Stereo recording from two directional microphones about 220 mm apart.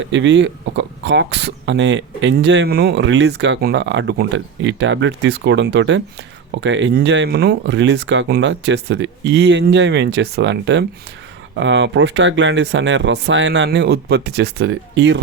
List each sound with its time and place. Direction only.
0.0 s speech: 55° right (ahead or behind)